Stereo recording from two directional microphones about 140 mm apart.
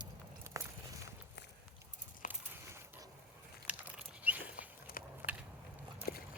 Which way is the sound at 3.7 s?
10° right (ahead or behind).